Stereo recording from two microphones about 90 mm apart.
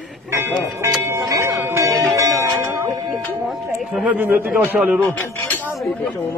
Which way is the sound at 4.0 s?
15° right (ahead or behind).